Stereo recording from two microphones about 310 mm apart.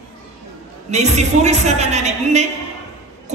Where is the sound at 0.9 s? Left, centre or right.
Right.